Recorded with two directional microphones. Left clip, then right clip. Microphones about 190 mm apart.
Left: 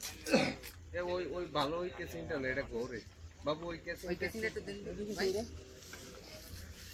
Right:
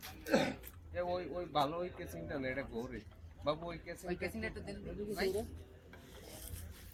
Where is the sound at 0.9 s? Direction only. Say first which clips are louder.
Left 1 dB; 50° right (ahead or behind).